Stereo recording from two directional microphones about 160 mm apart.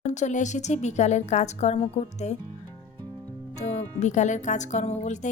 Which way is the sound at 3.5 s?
50° left (ahead or behind).